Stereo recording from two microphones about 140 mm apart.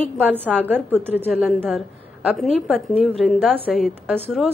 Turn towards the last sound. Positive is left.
turn(degrees=0)  # may be behind; listen again after turning